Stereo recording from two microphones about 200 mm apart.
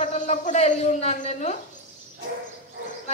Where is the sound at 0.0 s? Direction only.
35° left (ahead or behind).